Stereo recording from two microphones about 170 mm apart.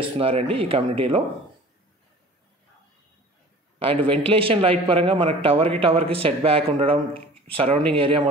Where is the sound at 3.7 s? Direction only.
35° right (ahead or behind).